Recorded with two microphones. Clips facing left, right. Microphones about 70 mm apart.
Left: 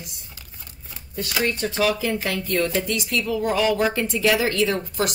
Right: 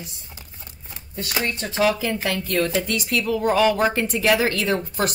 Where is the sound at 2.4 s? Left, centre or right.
Right.